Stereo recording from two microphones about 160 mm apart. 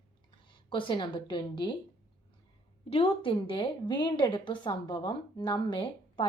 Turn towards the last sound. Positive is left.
turn(degrees=30)  # may be behind; listen again after turning